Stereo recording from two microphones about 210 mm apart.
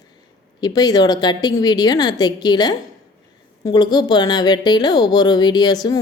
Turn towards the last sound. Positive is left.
turn(degrees=20)  # may be behind; listen again after turning